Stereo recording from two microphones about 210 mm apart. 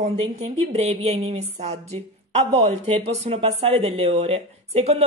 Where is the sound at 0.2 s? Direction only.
30° right (ahead or behind).